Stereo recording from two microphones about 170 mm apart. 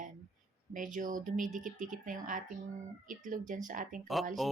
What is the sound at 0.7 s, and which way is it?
A woman's voice, 50° right (ahead or behind).